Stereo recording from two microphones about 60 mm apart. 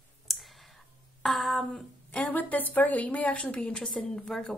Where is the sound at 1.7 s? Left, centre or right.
Left.